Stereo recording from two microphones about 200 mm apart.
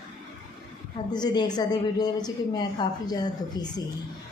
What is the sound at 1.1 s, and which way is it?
A woman's voice, 20° left (ahead or behind).